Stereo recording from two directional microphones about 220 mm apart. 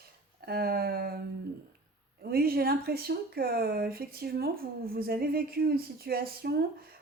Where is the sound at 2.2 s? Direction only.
45° right (ahead or behind).